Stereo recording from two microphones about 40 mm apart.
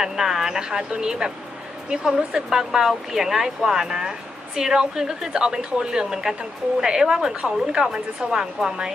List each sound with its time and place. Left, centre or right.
0.0 s speech: centre